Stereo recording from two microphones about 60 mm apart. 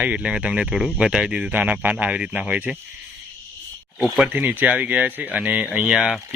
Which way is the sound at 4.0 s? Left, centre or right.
Centre.